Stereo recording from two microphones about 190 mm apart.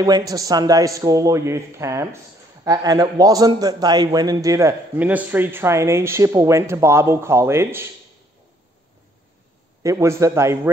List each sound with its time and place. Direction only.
0.0 s a man's voice: 20° right (ahead or behind)
9.8 s a man's voice: 15° right (ahead or behind)